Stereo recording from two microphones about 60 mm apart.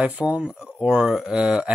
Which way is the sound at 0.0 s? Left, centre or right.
Right.